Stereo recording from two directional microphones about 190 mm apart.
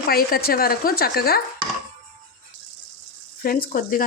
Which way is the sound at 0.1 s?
50° left (ahead or behind).